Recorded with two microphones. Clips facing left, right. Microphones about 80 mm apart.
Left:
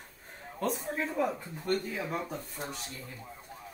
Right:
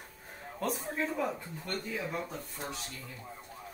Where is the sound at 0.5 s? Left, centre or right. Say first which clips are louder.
Left 2 dB; centre.